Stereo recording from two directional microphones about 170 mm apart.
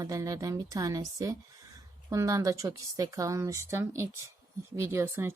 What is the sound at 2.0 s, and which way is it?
A woman's voice, 20° right (ahead or behind).